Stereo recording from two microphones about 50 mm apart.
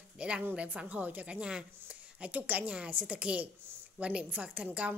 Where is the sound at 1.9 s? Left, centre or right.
Right.